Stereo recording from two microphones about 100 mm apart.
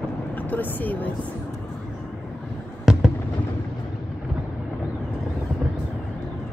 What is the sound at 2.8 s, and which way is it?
Fireworks, 5° right (ahead or behind).